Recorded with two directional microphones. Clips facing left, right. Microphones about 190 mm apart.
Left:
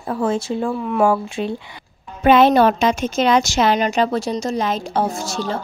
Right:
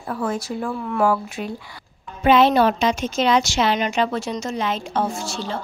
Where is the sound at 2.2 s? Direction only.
50° left (ahead or behind).